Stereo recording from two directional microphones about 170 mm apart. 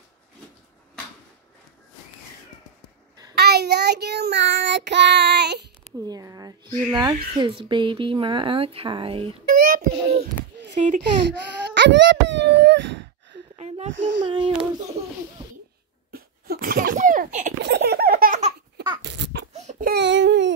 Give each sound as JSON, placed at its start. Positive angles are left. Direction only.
{"t": 3.3, "sound": "child singing", "side_deg": -70}
{"t": 6.0, "sound": "speech", "side_deg": -20}
{"t": 9.5, "sound": "child singing", "side_deg": -55}
{"t": 10.7, "sound": "speech", "side_deg": -45}
{"t": 11.0, "sound": "whimper", "side_deg": -85}
{"t": 13.6, "sound": "a sound", "side_deg": -40}
{"t": 13.9, "sound": "speech", "side_deg": -90}
{"t": 14.2, "sound": "a child's voice", "side_deg": -30}
{"t": 16.1, "sound": "a sound", "side_deg": -60}
{"t": 17.6, "sound": "laughter", "side_deg": -80}
{"t": 19.0, "sound": "a sound", "side_deg": -90}
{"t": 19.5, "sound": "baby cry", "side_deg": -40}
{"t": 19.8, "sound": "baby cry", "side_deg": -80}